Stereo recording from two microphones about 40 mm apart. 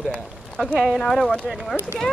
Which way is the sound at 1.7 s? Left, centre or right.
Right.